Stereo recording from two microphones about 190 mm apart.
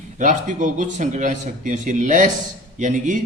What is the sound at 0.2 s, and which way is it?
Speech, 40° right (ahead or behind).